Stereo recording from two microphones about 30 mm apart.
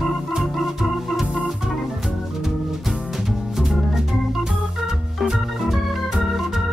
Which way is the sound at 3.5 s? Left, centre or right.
Centre.